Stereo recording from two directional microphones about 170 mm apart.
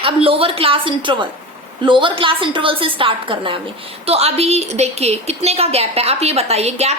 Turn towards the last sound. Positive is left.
turn(degrees=-40)  # may be behind; listen again after turning